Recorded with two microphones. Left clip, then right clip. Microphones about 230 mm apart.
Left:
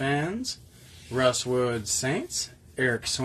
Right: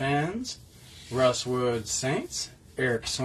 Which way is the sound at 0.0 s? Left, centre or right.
Left.